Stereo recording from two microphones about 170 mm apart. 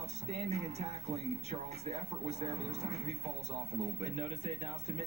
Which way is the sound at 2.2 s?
40° right (ahead or behind).